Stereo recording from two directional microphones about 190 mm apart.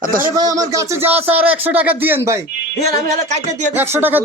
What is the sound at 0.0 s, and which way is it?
Speech, 45° right (ahead or behind).